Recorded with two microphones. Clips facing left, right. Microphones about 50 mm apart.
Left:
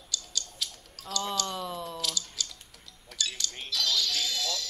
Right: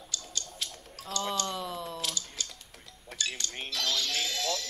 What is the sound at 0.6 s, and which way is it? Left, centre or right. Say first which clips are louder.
Gargling: even; right.